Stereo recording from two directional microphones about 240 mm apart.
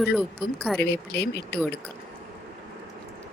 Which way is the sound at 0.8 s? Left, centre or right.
Left.